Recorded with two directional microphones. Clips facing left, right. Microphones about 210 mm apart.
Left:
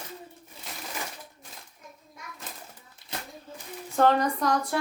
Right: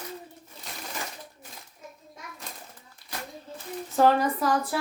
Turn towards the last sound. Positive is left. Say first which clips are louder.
# right 1 dB
turn(degrees=-5)  # may be behind; listen again after turning